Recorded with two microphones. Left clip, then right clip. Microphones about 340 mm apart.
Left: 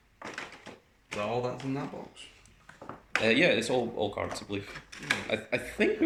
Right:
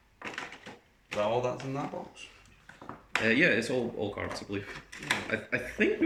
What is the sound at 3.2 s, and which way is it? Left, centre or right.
Speech, centre.